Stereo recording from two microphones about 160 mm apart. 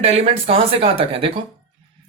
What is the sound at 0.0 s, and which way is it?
Speech, 40° right (ahead or behind).